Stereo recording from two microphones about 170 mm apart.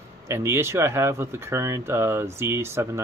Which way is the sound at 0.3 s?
15° right (ahead or behind).